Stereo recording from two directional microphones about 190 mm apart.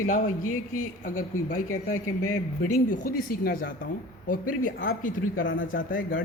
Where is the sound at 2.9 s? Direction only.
50° left (ahead or behind).